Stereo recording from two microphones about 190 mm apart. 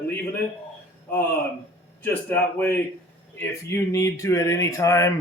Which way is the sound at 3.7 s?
15° left (ahead or behind).